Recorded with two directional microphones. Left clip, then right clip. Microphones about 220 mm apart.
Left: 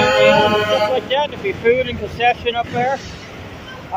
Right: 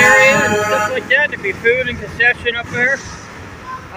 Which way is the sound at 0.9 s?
5° left (ahead or behind).